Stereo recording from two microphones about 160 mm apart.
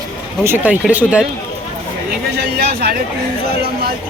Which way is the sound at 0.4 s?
10° right (ahead or behind).